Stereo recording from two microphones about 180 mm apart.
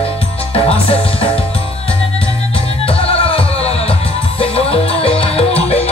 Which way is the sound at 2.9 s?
30° left (ahead or behind).